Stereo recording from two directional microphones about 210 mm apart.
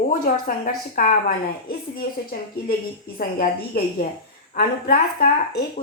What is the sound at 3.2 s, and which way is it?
Speech, 45° left (ahead or behind).